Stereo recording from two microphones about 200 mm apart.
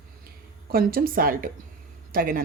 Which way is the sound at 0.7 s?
50° right (ahead or behind).